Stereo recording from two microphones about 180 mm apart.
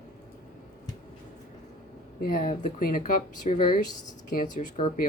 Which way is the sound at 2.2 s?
45° left (ahead or behind).